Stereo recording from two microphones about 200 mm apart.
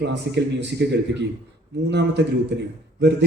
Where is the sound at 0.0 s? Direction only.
60° right (ahead or behind).